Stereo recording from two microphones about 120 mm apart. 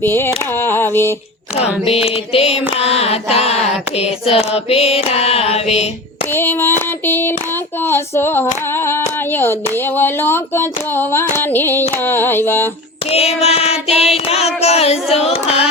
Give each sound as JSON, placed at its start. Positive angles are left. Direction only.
{"t": 0.0, "sound": "speech", "side_deg": 20}
{"t": 1.8, "sound": "female singing", "side_deg": 55}
{"t": 6.3, "sound": "speech", "side_deg": 20}
{"t": 13.1, "sound": "female singing", "side_deg": 60}